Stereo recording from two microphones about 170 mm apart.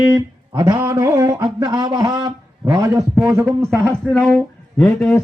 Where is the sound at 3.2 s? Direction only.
15° right (ahead or behind).